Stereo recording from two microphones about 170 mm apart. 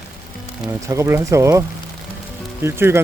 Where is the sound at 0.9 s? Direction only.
15° right (ahead or behind).